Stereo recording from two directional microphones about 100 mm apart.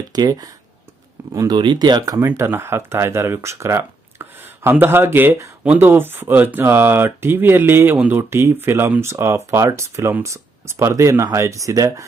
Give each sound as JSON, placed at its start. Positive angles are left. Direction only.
{"t": 0.1, "sound": "speech", "side_deg": -45}
{"t": 2.1, "sound": "speech", "side_deg": -25}